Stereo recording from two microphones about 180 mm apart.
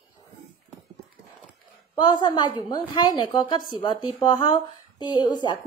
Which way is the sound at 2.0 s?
25° left (ahead or behind).